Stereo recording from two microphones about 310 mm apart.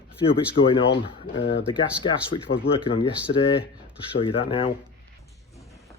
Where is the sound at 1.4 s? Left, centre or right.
Left.